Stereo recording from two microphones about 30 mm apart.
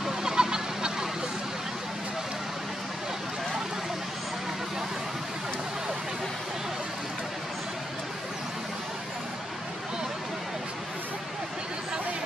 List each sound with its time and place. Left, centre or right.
0.2 s goose: right